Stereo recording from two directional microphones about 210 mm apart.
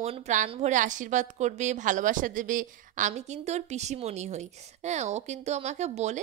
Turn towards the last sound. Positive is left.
turn(degrees=-35)  # may be behind; listen again after turning